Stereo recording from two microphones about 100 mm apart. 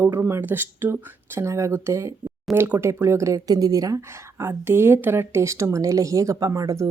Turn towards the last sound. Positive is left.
turn(degrees=-35)  # may be behind; listen again after turning